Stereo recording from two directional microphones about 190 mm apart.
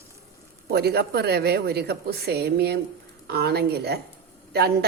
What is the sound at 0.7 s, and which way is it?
A man's voice, 55° right (ahead or behind).